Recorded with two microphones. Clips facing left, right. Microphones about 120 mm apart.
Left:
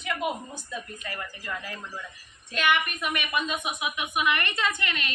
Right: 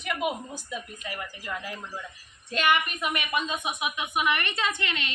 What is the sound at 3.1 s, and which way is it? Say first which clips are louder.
A woman's voice: left 2 dB; 20° right (ahead or behind).